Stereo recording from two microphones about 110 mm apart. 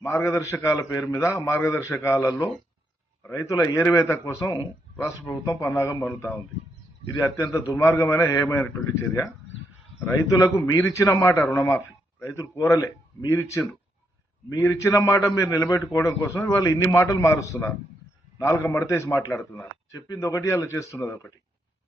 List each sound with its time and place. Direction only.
0.0 s a man's voice: 25° left (ahead or behind)
7.2 s a man's voice: 25° left (ahead or behind)